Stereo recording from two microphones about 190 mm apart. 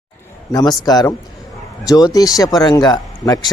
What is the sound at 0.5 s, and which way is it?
Speech, 20° left (ahead or behind).